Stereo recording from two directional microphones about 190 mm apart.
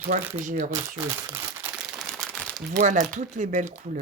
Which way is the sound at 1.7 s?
Centre (ahead or behind).